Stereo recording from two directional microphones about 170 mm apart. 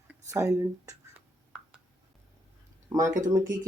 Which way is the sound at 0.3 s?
15° right (ahead or behind).